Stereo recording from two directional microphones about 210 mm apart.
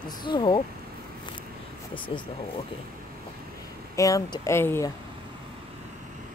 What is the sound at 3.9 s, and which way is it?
Speech, 15° left (ahead or behind).